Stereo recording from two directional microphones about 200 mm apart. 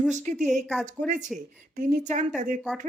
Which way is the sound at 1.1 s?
40° right (ahead or behind).